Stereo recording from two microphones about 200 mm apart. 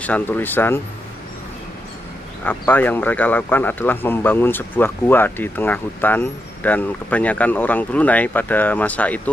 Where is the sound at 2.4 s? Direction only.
10° left (ahead or behind).